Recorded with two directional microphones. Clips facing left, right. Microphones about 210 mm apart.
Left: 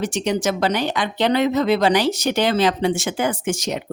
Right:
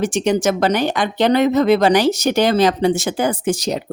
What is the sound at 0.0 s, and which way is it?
Speech, 50° right (ahead or behind).